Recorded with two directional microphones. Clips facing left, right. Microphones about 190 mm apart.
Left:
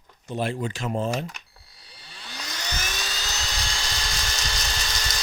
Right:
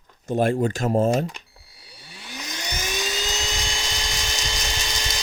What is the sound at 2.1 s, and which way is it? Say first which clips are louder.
Vacuum cleaner: right 3 dB; 15° right (ahead or behind).